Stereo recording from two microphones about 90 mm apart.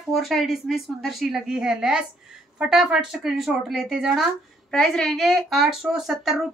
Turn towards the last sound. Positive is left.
turn(degrees=0)  # may be behind; listen again after turning